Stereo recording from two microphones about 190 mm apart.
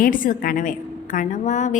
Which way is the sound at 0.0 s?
45° left (ahead or behind).